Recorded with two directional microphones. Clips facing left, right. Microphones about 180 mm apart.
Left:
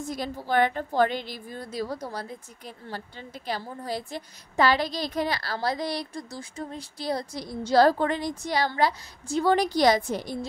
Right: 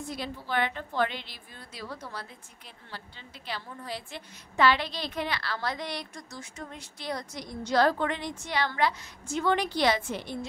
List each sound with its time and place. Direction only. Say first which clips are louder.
0.0 s a woman's voice: left 4 dB; 45° left (ahead or behind)